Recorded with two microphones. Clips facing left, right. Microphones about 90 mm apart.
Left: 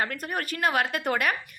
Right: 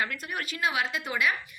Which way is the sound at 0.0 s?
45° left (ahead or behind).